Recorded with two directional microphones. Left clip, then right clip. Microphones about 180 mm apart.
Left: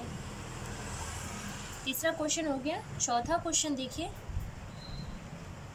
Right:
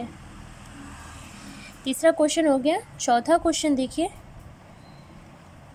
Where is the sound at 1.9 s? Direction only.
40° right (ahead or behind).